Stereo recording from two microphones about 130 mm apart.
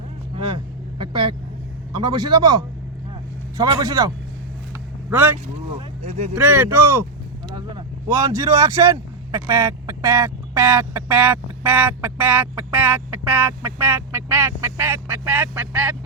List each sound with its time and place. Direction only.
0.3 s vehicle: 40° right (ahead or behind)
2.0 s a man's voice: 35° right (ahead or behind)
3.6 s speech: 30° right (ahead or behind)
5.0 s speech: 15° right (ahead or behind)
5.7 s speech: 55° right (ahead or behind)
6.3 s speech: 15° right (ahead or behind)